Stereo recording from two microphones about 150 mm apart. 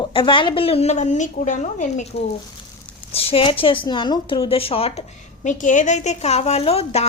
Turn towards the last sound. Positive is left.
turn(degrees=40)  # may be behind; listen again after turning